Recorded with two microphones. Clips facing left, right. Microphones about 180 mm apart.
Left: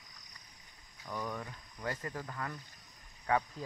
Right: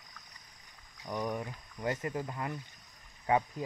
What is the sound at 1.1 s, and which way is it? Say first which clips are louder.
Speech: right 5 dB; 20° right (ahead or behind).